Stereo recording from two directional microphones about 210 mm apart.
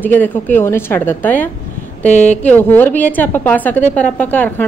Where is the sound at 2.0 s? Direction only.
35° left (ahead or behind).